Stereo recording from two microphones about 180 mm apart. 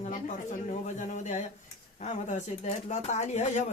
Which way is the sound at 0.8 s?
40° left (ahead or behind).